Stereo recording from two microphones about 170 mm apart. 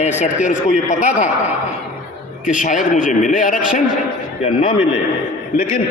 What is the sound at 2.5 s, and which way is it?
A man's voice, 50° left (ahead or behind).